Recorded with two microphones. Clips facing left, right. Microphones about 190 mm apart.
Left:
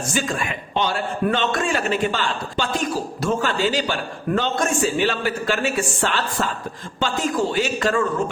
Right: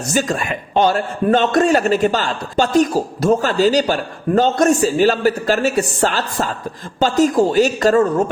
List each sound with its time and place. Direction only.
0.1 s a man's voice: 40° right (ahead or behind)